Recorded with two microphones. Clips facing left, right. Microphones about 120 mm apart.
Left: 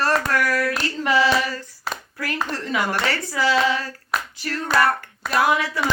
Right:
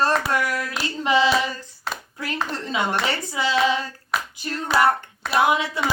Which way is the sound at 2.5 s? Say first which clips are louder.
Left 1 dB; 25° right (ahead or behind).